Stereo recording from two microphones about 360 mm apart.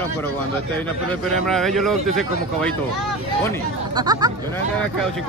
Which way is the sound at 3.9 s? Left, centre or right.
Centre.